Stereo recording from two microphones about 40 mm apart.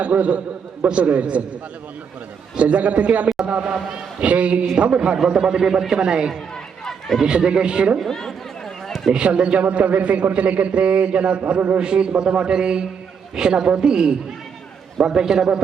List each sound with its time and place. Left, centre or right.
0.0 s a man's voice: right
2.6 s a man's voice: right
8.0 s speech: centre
9.1 s a man's voice: right
11.8 s a man's voice: right